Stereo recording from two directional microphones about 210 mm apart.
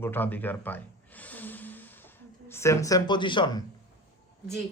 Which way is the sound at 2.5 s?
15° left (ahead or behind).